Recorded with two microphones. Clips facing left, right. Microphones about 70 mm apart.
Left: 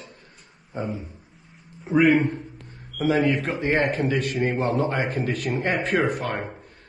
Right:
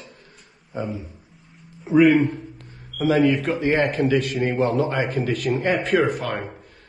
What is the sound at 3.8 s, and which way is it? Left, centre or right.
Speech, right.